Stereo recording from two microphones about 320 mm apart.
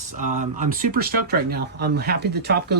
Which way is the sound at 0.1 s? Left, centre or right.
Right.